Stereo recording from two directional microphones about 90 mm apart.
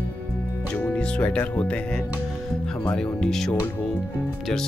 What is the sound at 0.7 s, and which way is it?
Speech, 10° left (ahead or behind).